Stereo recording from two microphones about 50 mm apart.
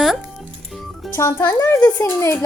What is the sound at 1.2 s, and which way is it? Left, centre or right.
Speech, left.